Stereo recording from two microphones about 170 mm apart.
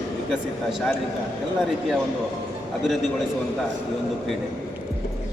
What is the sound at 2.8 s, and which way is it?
Speech, centre (ahead or behind).